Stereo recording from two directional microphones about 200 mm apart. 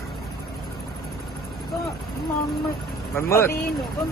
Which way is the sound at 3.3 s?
10° left (ahead or behind).